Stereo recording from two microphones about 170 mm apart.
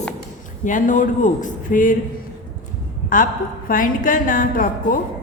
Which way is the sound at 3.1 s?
50° left (ahead or behind).